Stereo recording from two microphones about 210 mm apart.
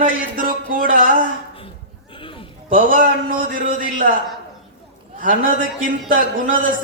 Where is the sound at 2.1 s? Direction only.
25° left (ahead or behind).